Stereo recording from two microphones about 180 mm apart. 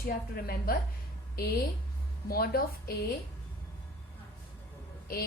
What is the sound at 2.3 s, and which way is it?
Speech, 55° left (ahead or behind).